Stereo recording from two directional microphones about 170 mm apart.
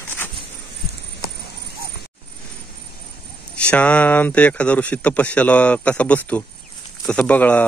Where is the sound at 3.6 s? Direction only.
5° left (ahead or behind).